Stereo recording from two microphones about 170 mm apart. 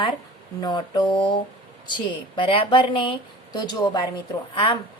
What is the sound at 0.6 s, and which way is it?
A woman's voice, 25° left (ahead or behind).